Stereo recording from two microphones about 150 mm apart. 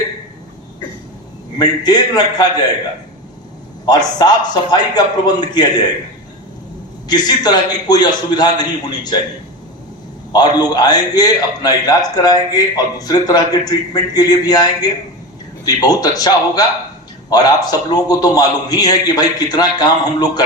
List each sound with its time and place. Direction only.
1.5 s a man's voice: 25° left (ahead or behind)
3.8 s a man's voice: 25° left (ahead or behind)
7.1 s a man's voice: 25° left (ahead or behind)
10.3 s a man's voice: 25° left (ahead or behind)